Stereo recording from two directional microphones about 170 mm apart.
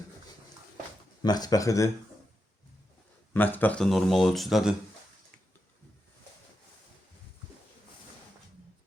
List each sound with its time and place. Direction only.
1.2 s speech: 20° left (ahead or behind)
3.3 s speech: 10° left (ahead or behind)